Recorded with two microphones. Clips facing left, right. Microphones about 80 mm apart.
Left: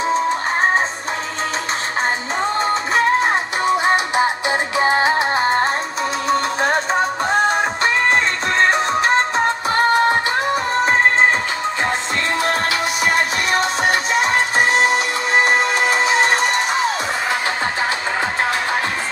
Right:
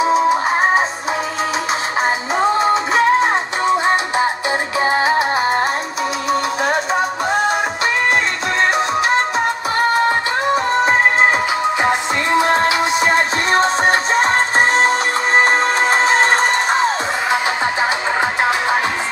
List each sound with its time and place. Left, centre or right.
0.0 s music: centre
2.0 s music: centre
8.6 s music: left
10.8 s music: centre
12.4 s music: right